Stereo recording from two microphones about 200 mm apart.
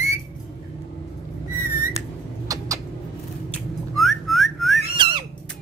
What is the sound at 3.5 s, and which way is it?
Whistling, centre (ahead or behind).